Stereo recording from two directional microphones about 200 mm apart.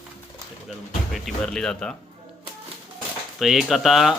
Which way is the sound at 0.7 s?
Centre (ahead or behind).